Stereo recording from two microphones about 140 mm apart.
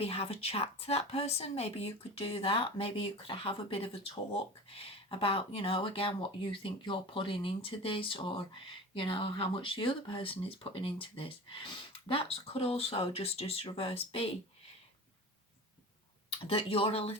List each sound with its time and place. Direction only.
0.0 s a woman's voice: 45° left (ahead or behind)
16.5 s a woman's voice: 40° left (ahead or behind)